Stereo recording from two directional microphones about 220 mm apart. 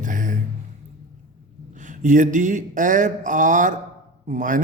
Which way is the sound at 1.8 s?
35° right (ahead or behind).